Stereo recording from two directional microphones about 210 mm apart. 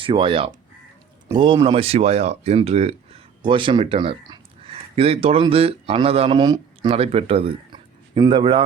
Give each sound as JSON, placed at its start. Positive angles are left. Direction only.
{"t": 0.0, "sound": "speech", "side_deg": -25}